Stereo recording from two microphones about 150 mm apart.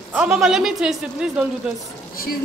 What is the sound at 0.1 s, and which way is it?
Speech, 5° right (ahead or behind).